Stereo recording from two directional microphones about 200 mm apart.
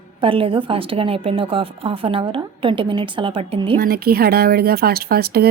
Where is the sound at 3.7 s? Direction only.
50° right (ahead or behind).